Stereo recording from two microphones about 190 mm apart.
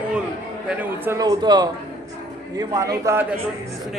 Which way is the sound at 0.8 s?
10° right (ahead or behind).